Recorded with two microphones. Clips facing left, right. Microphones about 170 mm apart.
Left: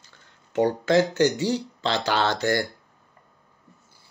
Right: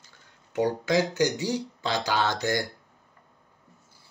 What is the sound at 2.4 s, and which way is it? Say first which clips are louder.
Speech: left 4 dB; 15° right (ahead or behind).